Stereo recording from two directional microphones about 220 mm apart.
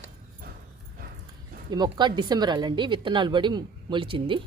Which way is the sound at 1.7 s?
20° right (ahead or behind).